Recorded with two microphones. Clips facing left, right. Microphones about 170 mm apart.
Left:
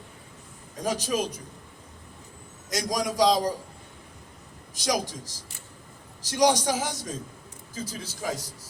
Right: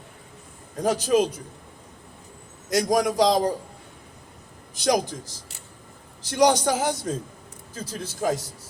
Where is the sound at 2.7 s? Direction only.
60° right (ahead or behind).